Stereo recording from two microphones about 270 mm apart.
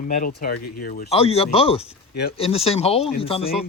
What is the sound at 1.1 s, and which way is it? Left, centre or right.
Speech, left.